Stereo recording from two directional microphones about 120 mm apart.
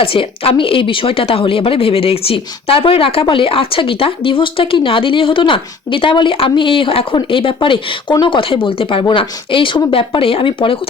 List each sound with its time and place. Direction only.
0.0 s speech: 50° left (ahead or behind)